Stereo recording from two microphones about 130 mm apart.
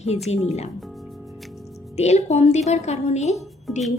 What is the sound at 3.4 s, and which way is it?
Speech, centre (ahead or behind).